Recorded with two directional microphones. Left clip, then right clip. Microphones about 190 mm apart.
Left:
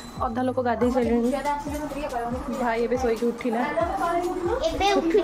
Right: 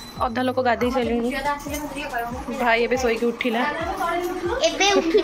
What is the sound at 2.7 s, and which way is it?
Speech, centre (ahead or behind).